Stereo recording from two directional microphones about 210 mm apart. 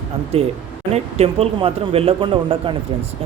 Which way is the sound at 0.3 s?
30° right (ahead or behind).